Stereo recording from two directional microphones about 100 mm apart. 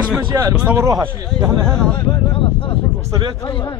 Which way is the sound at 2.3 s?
55° left (ahead or behind).